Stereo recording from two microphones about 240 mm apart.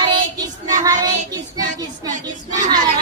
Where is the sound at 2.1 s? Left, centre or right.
Right.